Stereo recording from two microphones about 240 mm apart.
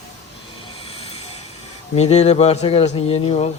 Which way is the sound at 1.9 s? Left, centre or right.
Left.